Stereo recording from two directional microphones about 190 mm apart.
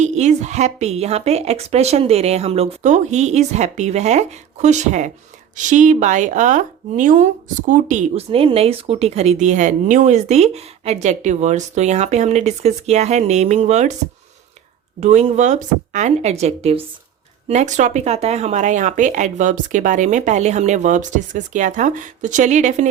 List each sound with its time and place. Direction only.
0.0 s a woman's voice: 35° right (ahead or behind)
15.0 s a woman's voice: 35° right (ahead or behind)